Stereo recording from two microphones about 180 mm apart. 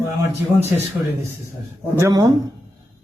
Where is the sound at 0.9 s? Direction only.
5° right (ahead or behind).